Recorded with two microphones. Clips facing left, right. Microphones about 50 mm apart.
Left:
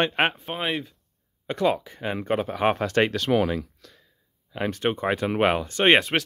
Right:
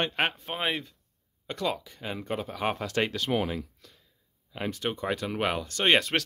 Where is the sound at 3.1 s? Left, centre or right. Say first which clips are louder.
Left 6 dB; left.